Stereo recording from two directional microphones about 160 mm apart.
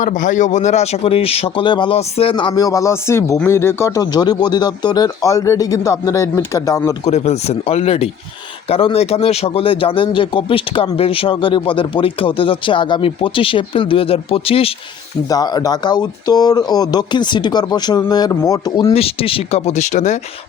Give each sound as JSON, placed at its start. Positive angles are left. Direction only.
{"t": 0.0, "sound": "speech", "side_deg": 50}
{"t": 7.0, "sound": "speech", "side_deg": 45}
{"t": 15.3, "sound": "speech", "side_deg": 25}
{"t": 18.9, "sound": "speech", "side_deg": 35}